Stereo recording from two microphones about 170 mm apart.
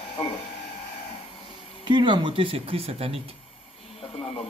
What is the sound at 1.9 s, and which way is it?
Speech, 30° right (ahead or behind).